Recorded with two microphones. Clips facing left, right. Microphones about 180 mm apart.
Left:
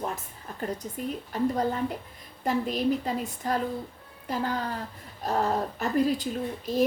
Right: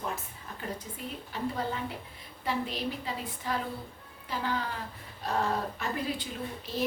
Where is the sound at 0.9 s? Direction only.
45° left (ahead or behind).